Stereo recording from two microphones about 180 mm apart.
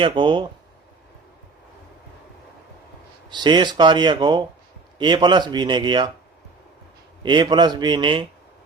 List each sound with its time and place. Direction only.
0.0 s speech: 25° right (ahead or behind)
3.2 s speech: 25° right (ahead or behind)
7.2 s speech: 25° right (ahead or behind)